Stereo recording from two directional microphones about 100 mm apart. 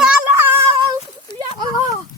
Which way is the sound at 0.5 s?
55° right (ahead or behind).